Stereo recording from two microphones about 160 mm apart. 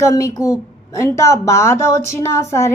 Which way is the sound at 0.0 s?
20° left (ahead or behind).